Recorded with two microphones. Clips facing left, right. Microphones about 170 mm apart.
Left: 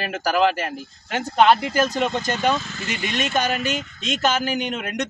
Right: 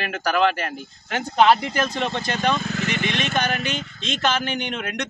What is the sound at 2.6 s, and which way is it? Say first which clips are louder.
Speech: right 4 dB; 60° right (ahead or behind).